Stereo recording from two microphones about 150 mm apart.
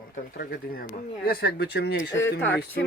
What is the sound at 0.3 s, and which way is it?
Speech, 90° left.